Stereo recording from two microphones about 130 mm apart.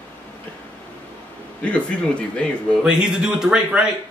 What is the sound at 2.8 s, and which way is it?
Speech, 10° right (ahead or behind).